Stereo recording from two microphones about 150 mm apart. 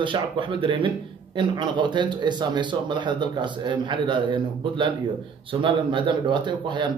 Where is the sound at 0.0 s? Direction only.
35° right (ahead or behind).